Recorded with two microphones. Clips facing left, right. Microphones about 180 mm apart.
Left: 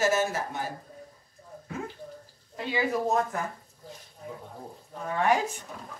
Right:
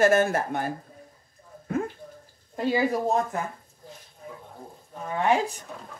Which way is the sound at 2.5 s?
45° right (ahead or behind).